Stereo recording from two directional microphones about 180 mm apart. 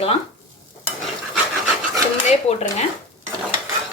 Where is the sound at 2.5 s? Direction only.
35° left (ahead or behind).